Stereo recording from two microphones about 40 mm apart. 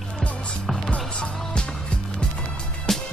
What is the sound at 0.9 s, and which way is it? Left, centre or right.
Music, left.